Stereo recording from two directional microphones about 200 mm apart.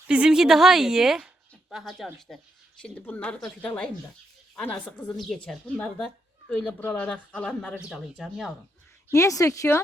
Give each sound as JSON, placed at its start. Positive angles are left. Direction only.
{"t": 0.1, "sound": "a woman's voice", "side_deg": -5}
{"t": 9.1, "sound": "speech", "side_deg": 15}